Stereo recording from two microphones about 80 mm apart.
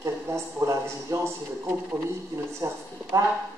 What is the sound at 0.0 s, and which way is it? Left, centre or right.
Speech, right.